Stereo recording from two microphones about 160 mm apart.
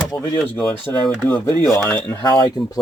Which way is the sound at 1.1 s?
15° left (ahead or behind).